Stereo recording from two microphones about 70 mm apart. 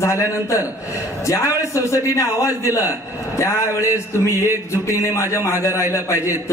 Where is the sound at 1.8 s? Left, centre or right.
Left.